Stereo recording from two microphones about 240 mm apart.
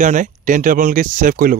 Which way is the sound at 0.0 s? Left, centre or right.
Right.